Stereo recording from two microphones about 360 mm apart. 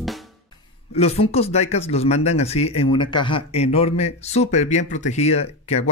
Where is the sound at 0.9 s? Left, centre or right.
Centre.